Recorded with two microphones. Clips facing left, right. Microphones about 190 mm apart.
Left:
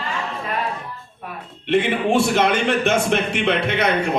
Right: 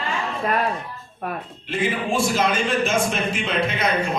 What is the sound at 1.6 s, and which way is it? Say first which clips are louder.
A man's voice: left 6 dB; 65° left (ahead or behind).